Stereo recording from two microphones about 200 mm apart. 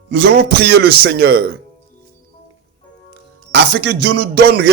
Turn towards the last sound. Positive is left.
turn(degrees=-50)  # may be behind; listen again after turning